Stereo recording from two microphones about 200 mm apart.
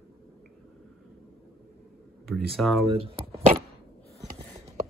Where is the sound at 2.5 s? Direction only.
Centre (ahead or behind).